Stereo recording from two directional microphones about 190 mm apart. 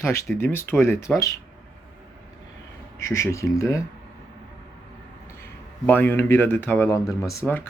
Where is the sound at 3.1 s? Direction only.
15° left (ahead or behind).